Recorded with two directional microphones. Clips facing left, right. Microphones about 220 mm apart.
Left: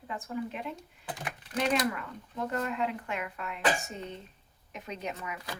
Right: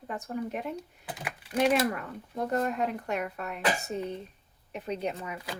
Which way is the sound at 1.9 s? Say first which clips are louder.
Right 2 dB; 40° right (ahead or behind).